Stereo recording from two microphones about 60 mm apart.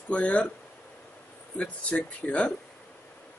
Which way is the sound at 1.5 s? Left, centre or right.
Centre.